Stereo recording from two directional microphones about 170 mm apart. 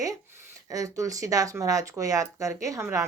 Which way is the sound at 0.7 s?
20° right (ahead or behind).